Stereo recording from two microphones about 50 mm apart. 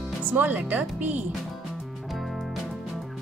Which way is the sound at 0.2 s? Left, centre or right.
Right.